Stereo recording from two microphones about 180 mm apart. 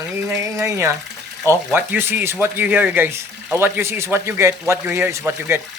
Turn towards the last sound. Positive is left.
turn(degrees=-15)  # may be behind; listen again after turning